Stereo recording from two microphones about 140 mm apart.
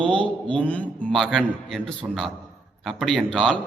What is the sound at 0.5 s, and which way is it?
A man's voice, 10° left (ahead or behind).